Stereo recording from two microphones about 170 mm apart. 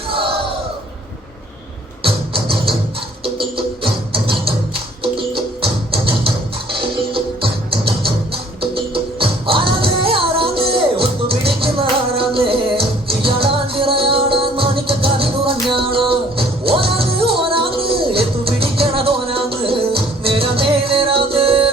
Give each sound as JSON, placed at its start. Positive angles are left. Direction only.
{"t": 2.0, "sound": "music", "side_deg": -30}
{"t": 3.8, "sound": "music", "side_deg": -30}